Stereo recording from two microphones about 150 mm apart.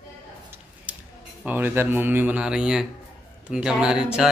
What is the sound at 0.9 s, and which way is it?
Scissors, 10° right (ahead or behind).